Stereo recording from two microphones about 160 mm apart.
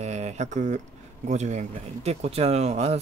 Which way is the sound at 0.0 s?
45° right (ahead or behind).